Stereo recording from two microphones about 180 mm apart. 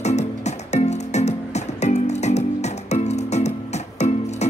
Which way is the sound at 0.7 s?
40° left (ahead or behind).